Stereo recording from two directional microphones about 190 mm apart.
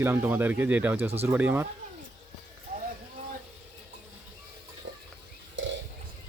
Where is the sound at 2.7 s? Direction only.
50° right (ahead or behind).